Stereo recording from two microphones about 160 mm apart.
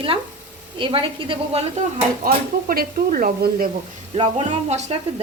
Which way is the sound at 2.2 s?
65° right (ahead or behind).